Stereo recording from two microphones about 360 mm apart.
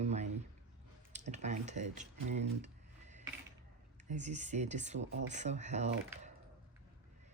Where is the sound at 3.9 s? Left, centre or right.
Centre.